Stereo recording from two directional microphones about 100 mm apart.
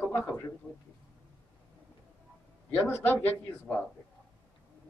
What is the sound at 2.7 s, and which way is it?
Speech, 20° left (ahead or behind).